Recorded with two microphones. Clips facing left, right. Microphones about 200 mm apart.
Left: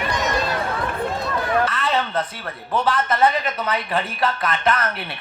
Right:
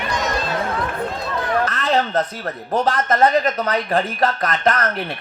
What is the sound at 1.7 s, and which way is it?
A man's voice, 45° right (ahead or behind).